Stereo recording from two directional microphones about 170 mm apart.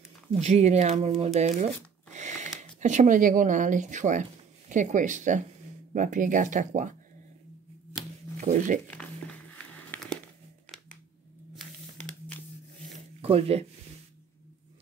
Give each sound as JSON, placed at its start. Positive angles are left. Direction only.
{"t": 0.3, "sound": "speech", "side_deg": -40}
{"t": 2.1, "sound": "a sound", "side_deg": -45}
{"t": 2.8, "sound": "speech", "side_deg": -45}
{"t": 8.4, "sound": "speech", "side_deg": -45}
{"t": 8.8, "sound": "a sound", "side_deg": 10}
{"t": 11.5, "sound": "tearing", "side_deg": 5}
{"t": 13.2, "sound": "speech", "side_deg": -35}